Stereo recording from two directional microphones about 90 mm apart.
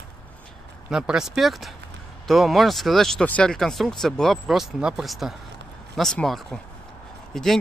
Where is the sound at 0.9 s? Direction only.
5° right (ahead or behind).